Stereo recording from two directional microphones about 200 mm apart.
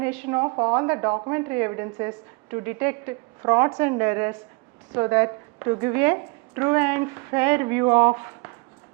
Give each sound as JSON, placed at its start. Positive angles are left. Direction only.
{"t": 0.0, "sound": "speech", "side_deg": -15}